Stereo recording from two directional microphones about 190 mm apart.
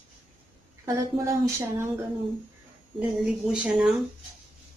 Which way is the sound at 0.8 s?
15° right (ahead or behind).